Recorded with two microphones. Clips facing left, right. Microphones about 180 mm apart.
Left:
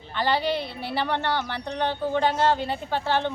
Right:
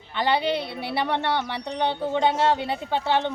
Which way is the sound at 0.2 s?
20° right (ahead or behind).